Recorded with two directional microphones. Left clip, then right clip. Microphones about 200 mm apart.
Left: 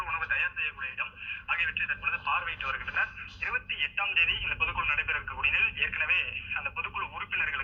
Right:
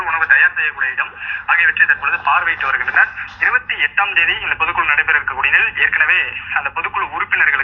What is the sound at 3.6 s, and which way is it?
A man's voice, 15° right (ahead or behind).